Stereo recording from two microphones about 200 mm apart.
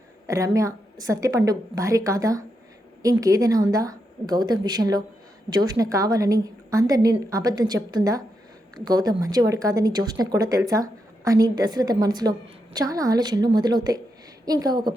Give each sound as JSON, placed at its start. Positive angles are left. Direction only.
{"t": 0.3, "sound": "a woman's voice", "side_deg": -15}